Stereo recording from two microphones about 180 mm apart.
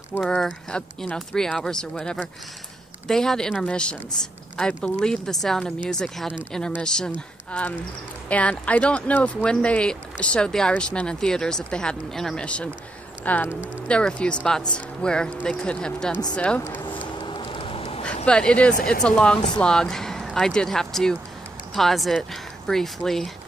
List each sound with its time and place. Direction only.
0.2 s speech: 5° left (ahead or behind)
8.3 s speech: 5° left (ahead or behind)
17.2 s a sound: 30° left (ahead or behind)
18.2 s speech: 5° left (ahead or behind)